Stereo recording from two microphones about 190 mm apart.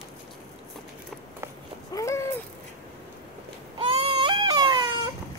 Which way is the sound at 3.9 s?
30° right (ahead or behind).